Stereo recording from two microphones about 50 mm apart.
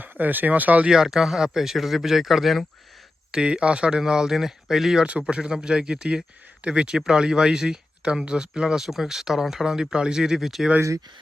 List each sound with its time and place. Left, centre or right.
0.0 s speech: right
0.9 s a man's voice: centre
3.3 s speech: centre
5.2 s speech: centre